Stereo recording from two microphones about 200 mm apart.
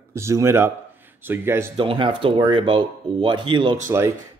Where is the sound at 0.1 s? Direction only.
15° right (ahead or behind).